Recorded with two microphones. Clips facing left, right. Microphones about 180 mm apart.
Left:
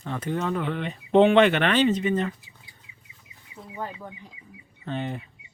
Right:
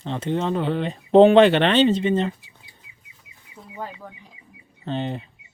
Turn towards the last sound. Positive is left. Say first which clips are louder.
# right 4 dB
turn(degrees=-25)  # may be behind; listen again after turning